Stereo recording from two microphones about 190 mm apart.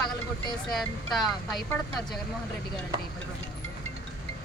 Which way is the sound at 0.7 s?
Centre (ahead or behind).